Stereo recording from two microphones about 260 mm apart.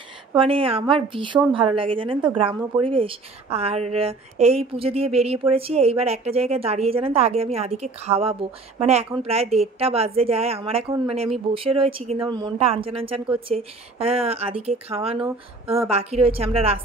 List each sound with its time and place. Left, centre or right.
0.3 s a woman's voice: right